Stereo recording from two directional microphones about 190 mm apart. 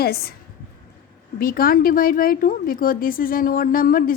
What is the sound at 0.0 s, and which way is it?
Speech, 55° left (ahead or behind).